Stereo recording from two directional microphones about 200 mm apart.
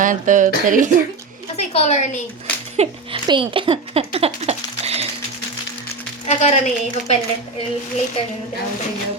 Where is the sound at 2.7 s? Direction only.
30° right (ahead or behind).